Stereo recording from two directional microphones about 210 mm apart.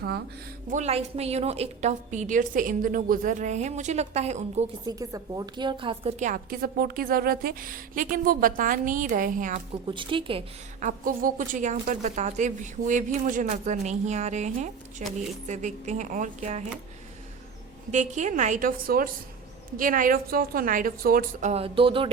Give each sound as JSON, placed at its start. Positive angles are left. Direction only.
{"t": 0.7, "sound": "a woman's voice", "side_deg": -30}
{"t": 4.9, "sound": "a woman's voice", "side_deg": -15}
{"t": 9.8, "sound": "a sound", "side_deg": -25}
{"t": 10.8, "sound": "a woman's voice", "side_deg": -40}
{"t": 17.9, "sound": "a woman's voice", "side_deg": -35}
{"t": 21.5, "sound": "a sound", "side_deg": -25}